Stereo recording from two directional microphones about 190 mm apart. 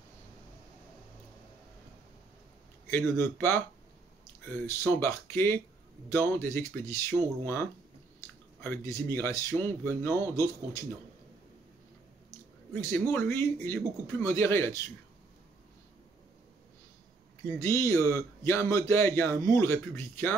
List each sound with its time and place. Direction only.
2.9 s a man's voice: 10° left (ahead or behind)
8.6 s a man's voice: 15° left (ahead or behind)
12.3 s a sound: 10° left (ahead or behind)
13.1 s a man's voice: 10° left (ahead or behind)
17.6 s a man's voice: 15° left (ahead or behind)